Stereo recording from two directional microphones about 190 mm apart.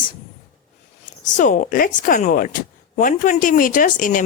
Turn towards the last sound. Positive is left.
turn(degrees=45)  # may be behind; listen again after turning